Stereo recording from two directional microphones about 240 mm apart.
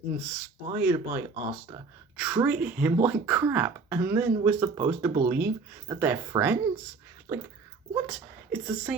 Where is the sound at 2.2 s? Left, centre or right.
Centre.